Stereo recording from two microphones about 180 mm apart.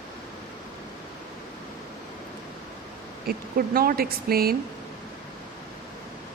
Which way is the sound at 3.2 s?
55° right (ahead or behind).